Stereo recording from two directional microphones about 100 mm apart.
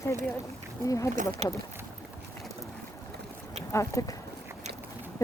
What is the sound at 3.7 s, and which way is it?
Speech, 30° left (ahead or behind).